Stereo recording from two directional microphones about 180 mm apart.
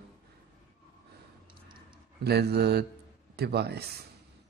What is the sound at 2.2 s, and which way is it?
Speech, 65° right (ahead or behind).